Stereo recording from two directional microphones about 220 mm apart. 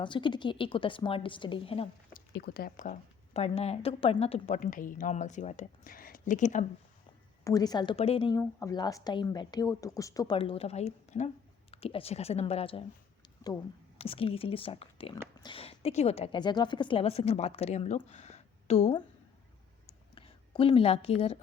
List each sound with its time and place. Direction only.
0.0 s a woman's voice: 20° left (ahead or behind)
2.3 s speech: 45° left (ahead or behind)
7.4 s a woman's voice: 15° left (ahead or behind)
8.4 s a woman's voice: 15° left (ahead or behind)
14.0 s a woman's voice: 25° left (ahead or behind)
20.1 s a woman's voice: 25° left (ahead or behind)